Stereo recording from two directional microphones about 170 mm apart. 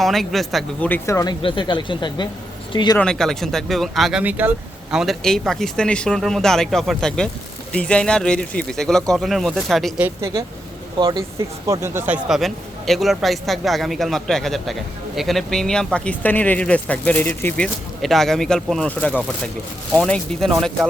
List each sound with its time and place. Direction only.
0.0 s speech: centre (ahead or behind); by 3.0 s 25° left (ahead or behind)
3.0 s a man's voice: 5° left (ahead or behind)
10.0 s speech: 15° right (ahead or behind)
11.6 s a man's voice: 15° right (ahead or behind); by 20.7 s 5° left (ahead or behind)